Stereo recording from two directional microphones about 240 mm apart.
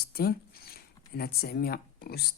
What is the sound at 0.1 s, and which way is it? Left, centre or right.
Speech, left.